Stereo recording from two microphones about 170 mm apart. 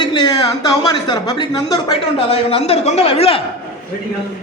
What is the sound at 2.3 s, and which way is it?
A man's voice, 35° left (ahead or behind).